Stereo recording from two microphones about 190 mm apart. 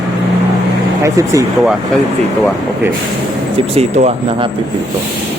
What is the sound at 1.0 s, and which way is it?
Speech, 15° right (ahead or behind).